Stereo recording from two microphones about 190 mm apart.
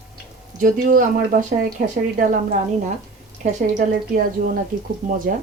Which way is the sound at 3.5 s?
45° right (ahead or behind).